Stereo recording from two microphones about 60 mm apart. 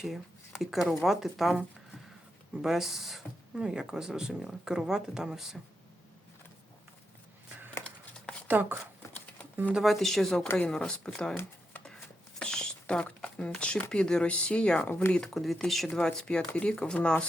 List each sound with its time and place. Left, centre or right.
0.6 s speech: centre
2.6 s speech: centre
7.9 s a sound: centre
8.4 s speech: right
9.8 s speech: centre
12.4 s a sound: centre
13.6 s speech: centre
15.3 s speech: centre
15.9 s speech: centre
16.5 s speech: left